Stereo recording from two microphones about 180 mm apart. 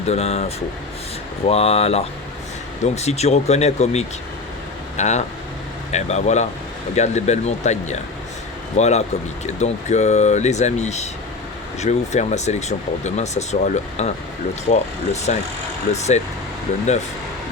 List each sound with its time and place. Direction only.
0.1 s speech: 35° left (ahead or behind)